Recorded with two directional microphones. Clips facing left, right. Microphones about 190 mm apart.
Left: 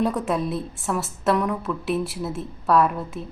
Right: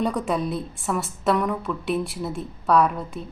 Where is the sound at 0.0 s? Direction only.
Centre (ahead or behind).